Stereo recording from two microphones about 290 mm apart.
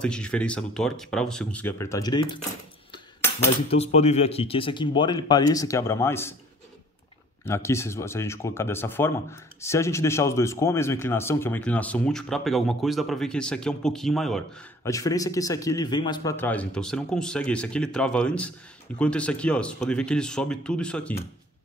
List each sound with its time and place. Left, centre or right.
0.0 s a man's voice: centre
3.7 s speech: left
7.4 s speech: centre
14.8 s a man's voice: centre